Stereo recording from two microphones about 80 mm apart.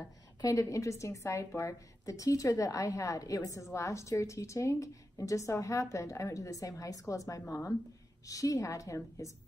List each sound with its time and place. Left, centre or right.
0.4 s a woman's voice: left